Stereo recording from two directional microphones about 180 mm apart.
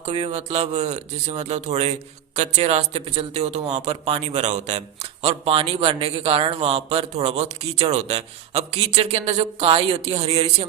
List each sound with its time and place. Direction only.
0.0 s a man's voice: 40° right (ahead or behind)